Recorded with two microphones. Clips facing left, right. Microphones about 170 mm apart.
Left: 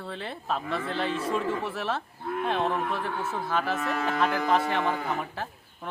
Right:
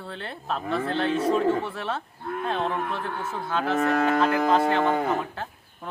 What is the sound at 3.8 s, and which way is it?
Cattle, 50° right (ahead or behind).